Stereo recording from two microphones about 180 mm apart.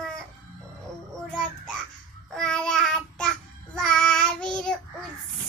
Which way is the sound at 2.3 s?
5° left (ahead or behind).